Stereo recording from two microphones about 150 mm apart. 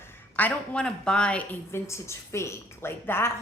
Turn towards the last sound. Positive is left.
turn(degrees=15)  # may be behind; listen again after turning